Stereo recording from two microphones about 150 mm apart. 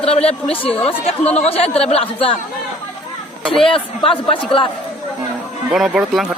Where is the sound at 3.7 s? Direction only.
35° left (ahead or behind).